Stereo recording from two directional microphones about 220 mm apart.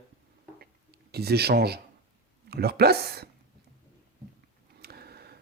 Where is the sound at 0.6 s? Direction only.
45° right (ahead or behind).